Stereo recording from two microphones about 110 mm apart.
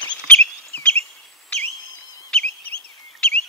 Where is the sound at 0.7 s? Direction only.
10° left (ahead or behind).